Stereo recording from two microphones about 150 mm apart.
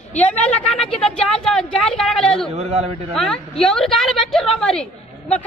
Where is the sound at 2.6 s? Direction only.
45° right (ahead or behind).